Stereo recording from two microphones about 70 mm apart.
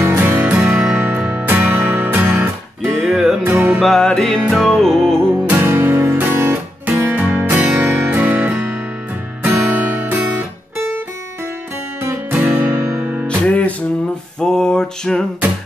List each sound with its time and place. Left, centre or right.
0.0 s music: right
2.9 s music: centre
3.4 s music: right
3.8 s music: centre
5.2 s music: right
12.3 s music: right
13.1 s music: right
13.5 s music: centre
14.4 s a sound: centre